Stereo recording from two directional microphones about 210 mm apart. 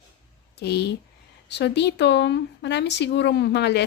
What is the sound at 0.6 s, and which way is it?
Speech, 50° left (ahead or behind).